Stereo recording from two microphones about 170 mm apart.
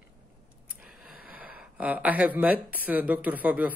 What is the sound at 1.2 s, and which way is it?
Speech, 10° right (ahead or behind).